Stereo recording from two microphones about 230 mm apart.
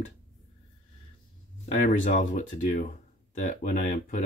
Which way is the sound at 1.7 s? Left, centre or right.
Left.